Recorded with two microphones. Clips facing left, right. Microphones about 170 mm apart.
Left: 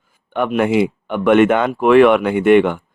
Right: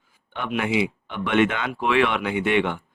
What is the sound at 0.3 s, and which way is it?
Speech, 50° left (ahead or behind).